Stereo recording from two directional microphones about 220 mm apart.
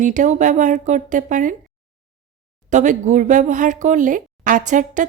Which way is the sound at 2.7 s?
35° right (ahead or behind).